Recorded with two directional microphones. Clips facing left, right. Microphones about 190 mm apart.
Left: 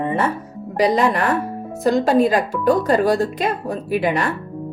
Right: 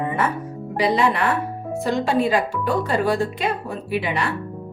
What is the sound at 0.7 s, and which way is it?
Speech, 40° left (ahead or behind).